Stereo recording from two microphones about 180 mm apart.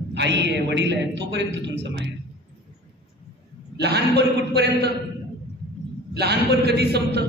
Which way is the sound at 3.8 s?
65° right (ahead or behind).